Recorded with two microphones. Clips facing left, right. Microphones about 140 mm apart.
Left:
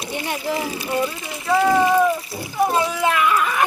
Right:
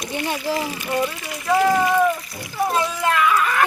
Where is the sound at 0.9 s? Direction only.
15° right (ahead or behind).